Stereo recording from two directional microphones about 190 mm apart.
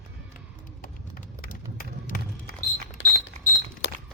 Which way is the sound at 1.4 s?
50° left (ahead or behind).